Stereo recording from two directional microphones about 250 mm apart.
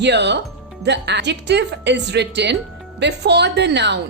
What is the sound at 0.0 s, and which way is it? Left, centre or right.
Speech, right.